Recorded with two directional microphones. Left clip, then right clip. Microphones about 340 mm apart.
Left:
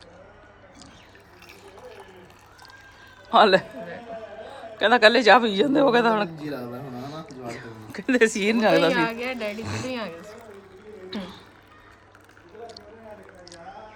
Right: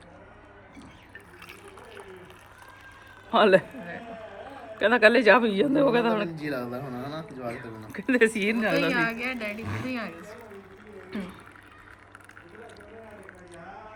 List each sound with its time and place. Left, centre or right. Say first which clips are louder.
3.3 s speech: left 3 dB; centre
4.8 s speech: left 3 dB; centre
9.0 s speech: left 2 dB; left
9.6 s speech: left 3 dB; centre
9.9 s speech: left 3 dB; centre